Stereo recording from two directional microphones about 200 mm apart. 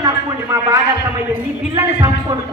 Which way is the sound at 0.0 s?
15° right (ahead or behind).